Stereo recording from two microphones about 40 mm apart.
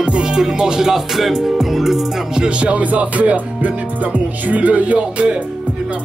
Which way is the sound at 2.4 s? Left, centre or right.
Right.